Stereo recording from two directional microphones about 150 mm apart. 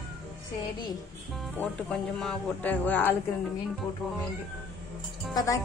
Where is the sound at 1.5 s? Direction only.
5° left (ahead or behind).